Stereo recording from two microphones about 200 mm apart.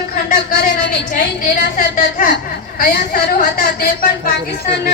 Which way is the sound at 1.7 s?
40° left (ahead or behind).